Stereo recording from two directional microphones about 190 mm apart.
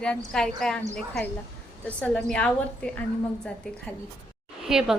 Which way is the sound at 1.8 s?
5° left (ahead or behind).